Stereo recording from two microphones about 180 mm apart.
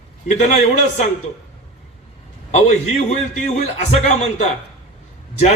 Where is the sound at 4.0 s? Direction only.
40° left (ahead or behind).